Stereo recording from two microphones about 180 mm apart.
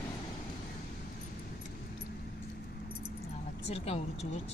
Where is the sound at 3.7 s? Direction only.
35° left (ahead or behind).